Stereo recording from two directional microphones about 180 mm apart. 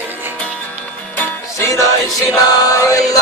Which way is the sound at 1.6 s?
15° left (ahead or behind).